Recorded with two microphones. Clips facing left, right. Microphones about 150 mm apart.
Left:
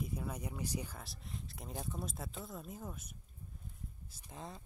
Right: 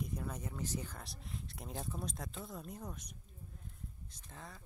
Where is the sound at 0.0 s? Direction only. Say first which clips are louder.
Left 1 dB; 5° left (ahead or behind); by 4.6 s 20° left (ahead or behind).